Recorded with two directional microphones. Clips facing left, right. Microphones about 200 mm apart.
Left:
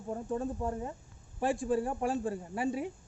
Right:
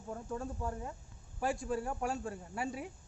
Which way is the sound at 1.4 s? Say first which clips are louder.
Left 5 dB; centre (ahead or behind).